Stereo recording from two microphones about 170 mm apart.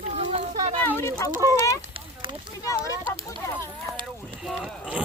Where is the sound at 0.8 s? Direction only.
15° left (ahead or behind).